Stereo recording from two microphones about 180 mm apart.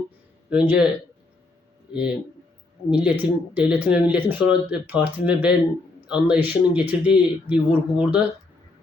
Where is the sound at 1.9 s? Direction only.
5° right (ahead or behind).